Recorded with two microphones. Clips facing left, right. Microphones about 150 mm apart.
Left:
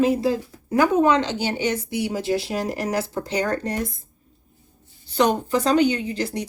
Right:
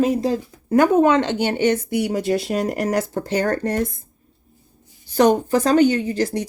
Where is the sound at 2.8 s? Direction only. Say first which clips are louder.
Right 3 dB; 55° right (ahead or behind).